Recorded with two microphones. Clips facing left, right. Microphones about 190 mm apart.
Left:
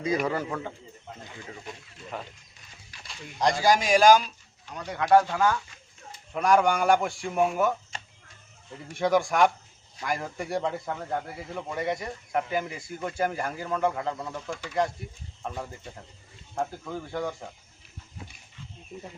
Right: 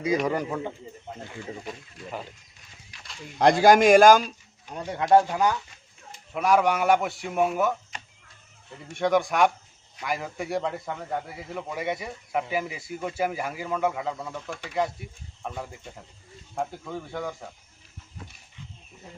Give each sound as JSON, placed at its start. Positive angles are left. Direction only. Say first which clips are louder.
{"t": 0.3, "sound": "speech", "louder": "right 2 dB", "side_deg": -15}
{"t": 3.3, "sound": "a man's voice", "louder": "right 6 dB", "side_deg": -55}
{"t": 4.8, "sound": "speech", "louder": "right 1 dB", "side_deg": -25}
{"t": 6.3, "sound": "a man's voice", "louder": "even", "side_deg": -5}
{"t": 9.0, "sound": "a man's voice", "louder": "even", "side_deg": 0}